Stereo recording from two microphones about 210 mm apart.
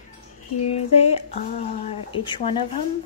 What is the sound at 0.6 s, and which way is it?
Speech, 30° left (ahead or behind).